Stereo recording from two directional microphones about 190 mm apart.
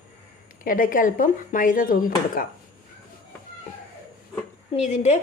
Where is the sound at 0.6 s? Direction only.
45° left (ahead or behind).